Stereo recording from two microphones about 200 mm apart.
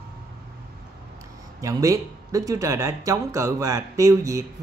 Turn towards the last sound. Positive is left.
turn(degrees=-15)  # may be behind; listen again after turning